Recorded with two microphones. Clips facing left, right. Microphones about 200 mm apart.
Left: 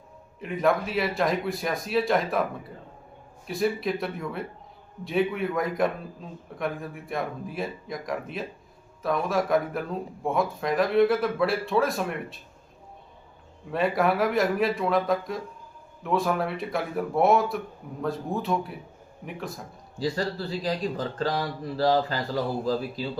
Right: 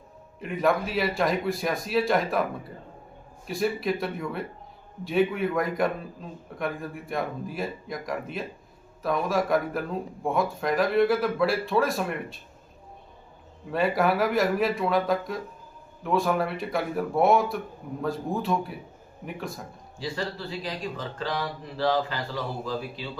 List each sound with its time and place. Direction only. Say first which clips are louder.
0.3 s speech: even; centre (ahead or behind)
13.7 s speech: even; centre (ahead or behind)
20.0 s speech: left 4 dB; 40° left (ahead or behind)